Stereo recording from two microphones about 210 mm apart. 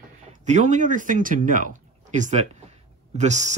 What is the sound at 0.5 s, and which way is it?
Speech, 35° right (ahead or behind).